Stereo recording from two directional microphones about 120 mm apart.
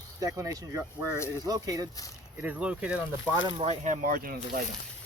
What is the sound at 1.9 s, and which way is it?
Speech, 30° left (ahead or behind).